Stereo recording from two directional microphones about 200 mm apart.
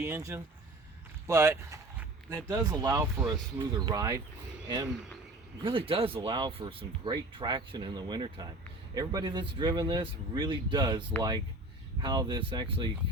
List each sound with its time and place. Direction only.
0.0 s speech: 15° right (ahead or behind)
5.6 s speech: 25° right (ahead or behind)